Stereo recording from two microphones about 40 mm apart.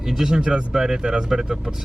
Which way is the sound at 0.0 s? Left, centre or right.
Centre.